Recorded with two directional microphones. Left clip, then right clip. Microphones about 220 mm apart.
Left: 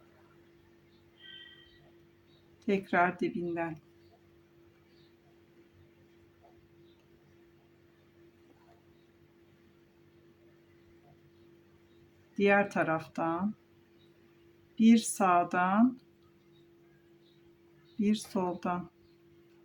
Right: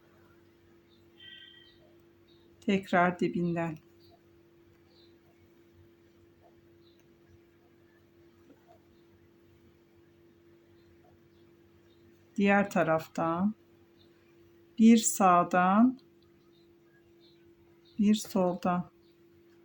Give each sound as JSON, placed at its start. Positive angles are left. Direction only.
{"t": 2.6, "sound": "speech", "side_deg": -30}
{"t": 12.4, "sound": "speech", "side_deg": -30}
{"t": 14.8, "sound": "speech", "side_deg": -30}
{"t": 18.0, "sound": "speech", "side_deg": -30}